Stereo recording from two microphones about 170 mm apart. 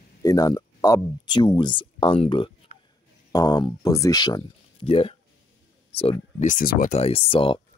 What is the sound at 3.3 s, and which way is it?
Speech, 20° left (ahead or behind).